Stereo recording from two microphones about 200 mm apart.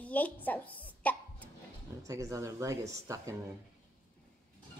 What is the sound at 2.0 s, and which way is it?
Speech, 15° right (ahead or behind).